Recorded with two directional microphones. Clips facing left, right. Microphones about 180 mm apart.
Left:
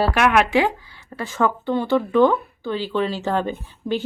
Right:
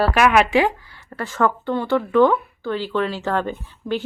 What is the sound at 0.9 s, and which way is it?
Speech, 15° left (ahead or behind).